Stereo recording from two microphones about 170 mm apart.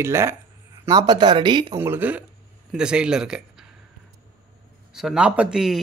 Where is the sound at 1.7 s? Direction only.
15° right (ahead or behind).